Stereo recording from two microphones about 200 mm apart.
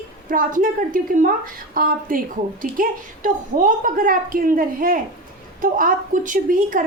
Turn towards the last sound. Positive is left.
turn(degrees=-45)  # may be behind; listen again after turning